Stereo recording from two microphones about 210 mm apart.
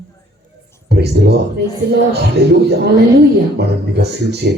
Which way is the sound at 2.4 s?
50° right (ahead or behind).